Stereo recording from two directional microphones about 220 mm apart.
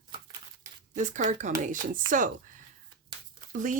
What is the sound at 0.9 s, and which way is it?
Speech, 35° right (ahead or behind).